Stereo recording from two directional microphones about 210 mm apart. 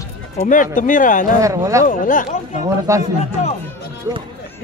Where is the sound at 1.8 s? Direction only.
40° left (ahead or behind).